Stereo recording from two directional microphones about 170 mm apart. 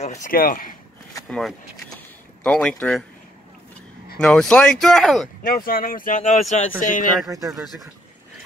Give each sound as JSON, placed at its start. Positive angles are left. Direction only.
{"t": 0.0, "sound": "speech", "side_deg": 45}
{"t": 1.3, "sound": "speech", "side_deg": 0}
{"t": 4.2, "sound": "speech", "side_deg": 5}
{"t": 5.5, "sound": "speech", "side_deg": 60}
{"t": 7.2, "sound": "speech", "side_deg": -20}
{"t": 7.5, "sound": "speech", "side_deg": 0}